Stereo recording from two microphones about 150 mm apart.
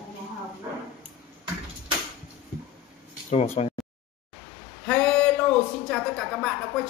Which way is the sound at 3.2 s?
50° left (ahead or behind).